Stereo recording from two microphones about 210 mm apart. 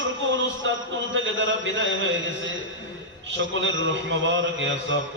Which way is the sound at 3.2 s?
60° right (ahead or behind).